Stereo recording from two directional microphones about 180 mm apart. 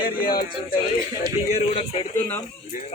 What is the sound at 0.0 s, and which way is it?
Music, 55° left (ahead or behind).